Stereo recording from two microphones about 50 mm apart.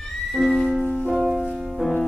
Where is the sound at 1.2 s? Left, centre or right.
Centre.